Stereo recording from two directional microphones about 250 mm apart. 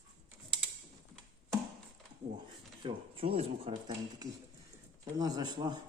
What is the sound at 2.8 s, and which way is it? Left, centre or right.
Speech, right.